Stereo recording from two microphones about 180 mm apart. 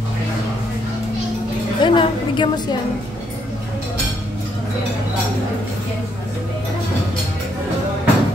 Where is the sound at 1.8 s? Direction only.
25° left (ahead or behind).